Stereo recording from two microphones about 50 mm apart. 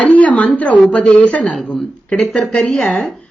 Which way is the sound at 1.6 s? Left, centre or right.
Centre.